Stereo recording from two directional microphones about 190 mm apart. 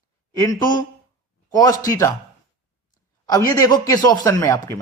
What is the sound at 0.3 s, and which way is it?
A man's voice, 20° left (ahead or behind).